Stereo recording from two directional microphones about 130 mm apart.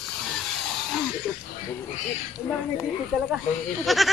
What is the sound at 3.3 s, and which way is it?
Speech, centre (ahead or behind).